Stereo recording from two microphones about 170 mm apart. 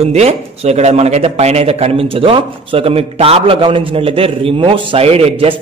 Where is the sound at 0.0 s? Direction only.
40° right (ahead or behind).